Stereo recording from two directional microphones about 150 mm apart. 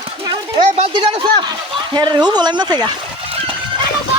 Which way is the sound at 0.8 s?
35° right (ahead or behind).